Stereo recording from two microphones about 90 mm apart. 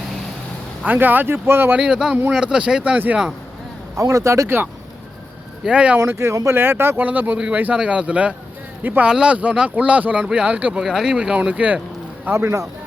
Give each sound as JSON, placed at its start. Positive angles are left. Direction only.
{"t": 0.9, "sound": "speech", "side_deg": -20}
{"t": 1.8, "sound": "speech", "side_deg": -10}
{"t": 3.9, "sound": "speech", "side_deg": -35}
{"t": 5.6, "sound": "speech", "side_deg": -10}
{"t": 6.0, "sound": "speech", "side_deg": -30}
{"t": 9.0, "sound": "speech", "side_deg": -10}
{"t": 10.8, "sound": "speech", "side_deg": -5}
{"t": 12.2, "sound": "speech", "side_deg": -25}